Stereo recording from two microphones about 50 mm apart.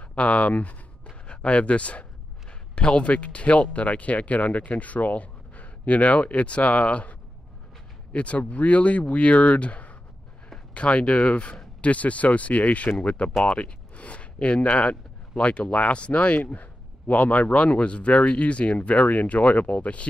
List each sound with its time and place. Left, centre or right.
0.0 s speech: left